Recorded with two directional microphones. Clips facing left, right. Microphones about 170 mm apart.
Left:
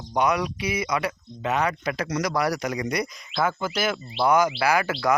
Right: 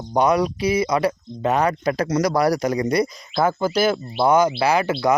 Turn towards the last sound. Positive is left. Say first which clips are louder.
# right 4 dB
turn(degrees=-20)  # may be behind; listen again after turning